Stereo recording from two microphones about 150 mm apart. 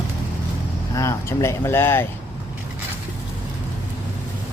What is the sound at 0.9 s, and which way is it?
Speech, 20° left (ahead or behind).